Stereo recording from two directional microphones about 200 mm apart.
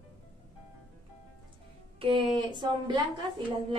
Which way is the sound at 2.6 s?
25° right (ahead or behind).